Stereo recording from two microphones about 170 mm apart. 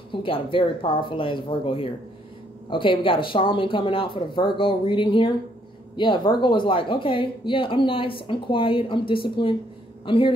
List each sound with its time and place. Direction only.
0.1 s a woman's voice: 30° left (ahead or behind)